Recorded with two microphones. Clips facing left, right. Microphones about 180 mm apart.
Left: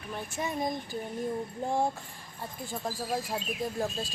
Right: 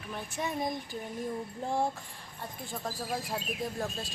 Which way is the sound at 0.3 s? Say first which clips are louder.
Left 1 dB; centre (ahead or behind).